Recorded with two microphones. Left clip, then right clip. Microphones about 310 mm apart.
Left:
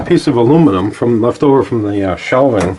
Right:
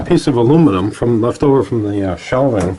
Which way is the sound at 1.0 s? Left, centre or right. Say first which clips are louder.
Left 2 dB; centre.